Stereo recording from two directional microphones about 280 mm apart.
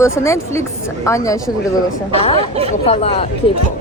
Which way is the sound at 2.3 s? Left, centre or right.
Right.